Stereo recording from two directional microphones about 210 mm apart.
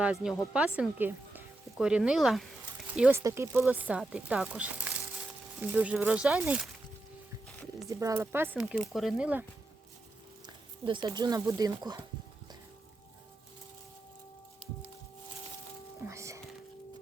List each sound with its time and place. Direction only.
0.0 s speech: 5° right (ahead or behind)
7.9 s speech: 15° right (ahead or behind)
10.4 s speech: 20° right (ahead or behind)
16.0 s music: 15° right (ahead or behind)